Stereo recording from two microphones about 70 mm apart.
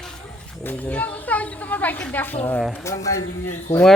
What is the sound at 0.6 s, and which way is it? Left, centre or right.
Speech, left.